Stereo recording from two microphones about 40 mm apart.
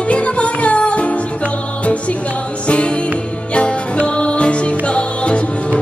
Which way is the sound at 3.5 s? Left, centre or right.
Left.